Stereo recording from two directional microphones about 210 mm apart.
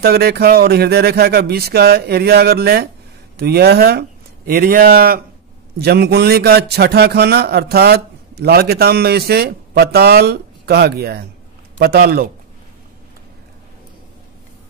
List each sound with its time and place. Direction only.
0.0 s a man's voice: 50° right (ahead or behind)